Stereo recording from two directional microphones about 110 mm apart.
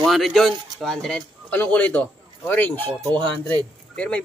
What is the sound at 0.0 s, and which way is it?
Speech, centre (ahead or behind).